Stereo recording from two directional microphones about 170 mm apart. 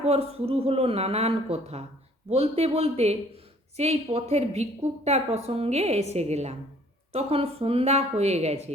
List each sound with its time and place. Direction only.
0.0 s a woman's voice: 35° right (ahead or behind)